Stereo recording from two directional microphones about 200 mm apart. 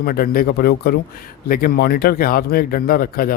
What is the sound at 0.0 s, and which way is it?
Speech, 45° left (ahead or behind).